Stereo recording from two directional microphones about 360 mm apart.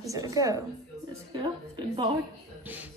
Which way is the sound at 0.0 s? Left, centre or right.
Centre.